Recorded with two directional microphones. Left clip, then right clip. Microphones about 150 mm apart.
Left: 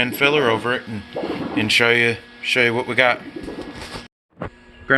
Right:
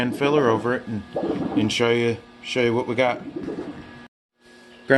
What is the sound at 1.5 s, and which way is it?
Speech, 15° right (ahead or behind).